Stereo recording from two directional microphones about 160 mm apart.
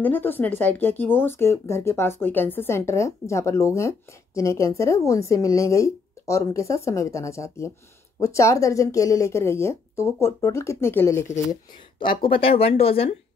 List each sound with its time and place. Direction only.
0.0 s a woman's voice: 10° left (ahead or behind)
12.0 s speech: 35° left (ahead or behind)